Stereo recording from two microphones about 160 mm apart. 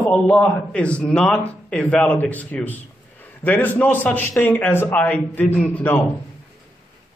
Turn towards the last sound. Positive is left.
turn(degrees=10)  # may be behind; listen again after turning